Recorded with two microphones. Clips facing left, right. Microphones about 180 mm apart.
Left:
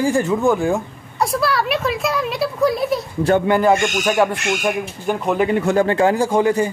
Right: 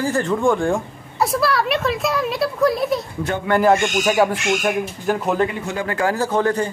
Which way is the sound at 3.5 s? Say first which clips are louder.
Even; centre (ahead or behind).